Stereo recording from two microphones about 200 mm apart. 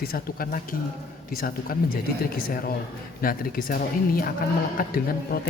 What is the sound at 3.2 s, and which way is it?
A man's voice, 45° left (ahead or behind).